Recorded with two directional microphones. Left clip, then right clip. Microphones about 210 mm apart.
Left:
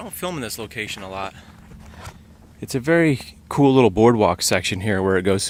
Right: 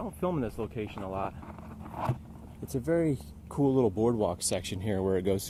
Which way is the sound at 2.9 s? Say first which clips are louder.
Left 11 dB; 50° left (ahead or behind).